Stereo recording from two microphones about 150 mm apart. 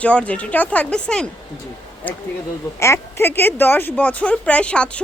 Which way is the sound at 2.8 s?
15° left (ahead or behind).